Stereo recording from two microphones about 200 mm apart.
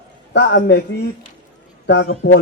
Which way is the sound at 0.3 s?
55° left (ahead or behind).